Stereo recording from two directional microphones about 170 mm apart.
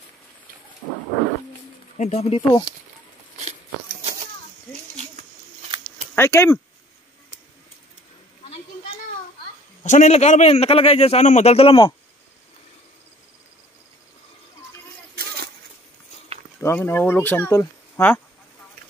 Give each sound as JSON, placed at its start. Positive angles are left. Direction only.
{"t": 2.0, "sound": "a man's voice", "side_deg": 40}
{"t": 6.1, "sound": "speech", "side_deg": 15}
{"t": 9.8, "sound": "a man's voice", "side_deg": 45}
{"t": 16.6, "sound": "speech", "side_deg": 15}